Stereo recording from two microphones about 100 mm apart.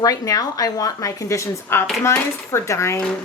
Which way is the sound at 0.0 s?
35° left (ahead or behind).